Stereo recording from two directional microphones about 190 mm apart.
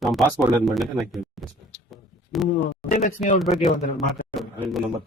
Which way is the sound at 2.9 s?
40° left (ahead or behind).